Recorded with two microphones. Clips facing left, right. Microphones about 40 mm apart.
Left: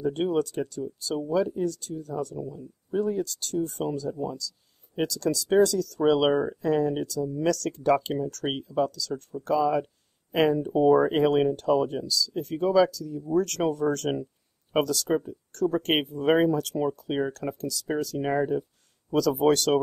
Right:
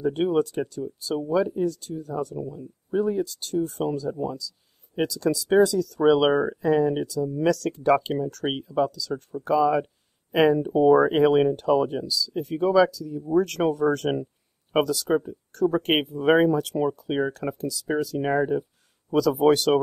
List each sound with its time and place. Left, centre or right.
0.0 s speech: centre
2.4 s speech: right
2.9 s speech: centre